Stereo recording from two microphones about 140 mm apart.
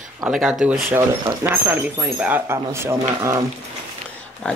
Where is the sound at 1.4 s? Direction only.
15° right (ahead or behind).